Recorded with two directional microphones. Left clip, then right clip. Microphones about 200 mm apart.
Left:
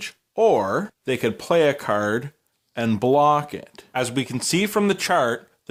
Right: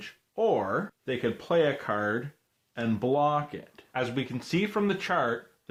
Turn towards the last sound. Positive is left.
turn(degrees=45)  # may be behind; listen again after turning